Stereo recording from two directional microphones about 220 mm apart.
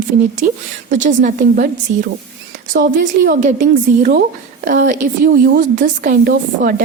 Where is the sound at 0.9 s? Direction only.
35° right (ahead or behind).